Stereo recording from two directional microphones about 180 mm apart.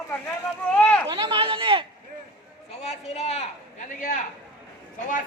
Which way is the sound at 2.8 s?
35° left (ahead or behind).